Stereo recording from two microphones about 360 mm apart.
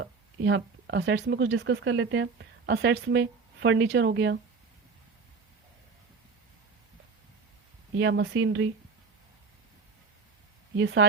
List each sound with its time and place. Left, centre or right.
0.0 s speech: right
7.9 s speech: right
10.8 s speech: right